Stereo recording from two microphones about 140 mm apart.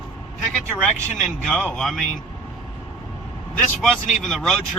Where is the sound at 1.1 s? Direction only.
Centre (ahead or behind).